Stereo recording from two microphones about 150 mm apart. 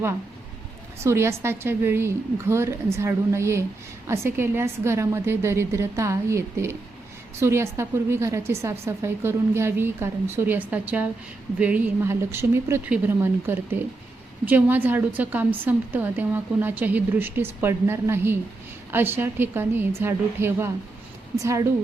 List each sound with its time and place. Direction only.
1.0 s a woman's voice: 15° right (ahead or behind)